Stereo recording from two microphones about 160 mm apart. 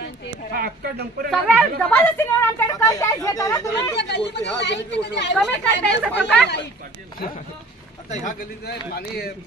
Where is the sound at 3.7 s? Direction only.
90° left.